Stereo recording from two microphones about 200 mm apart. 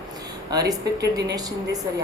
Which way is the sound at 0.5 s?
20° right (ahead or behind).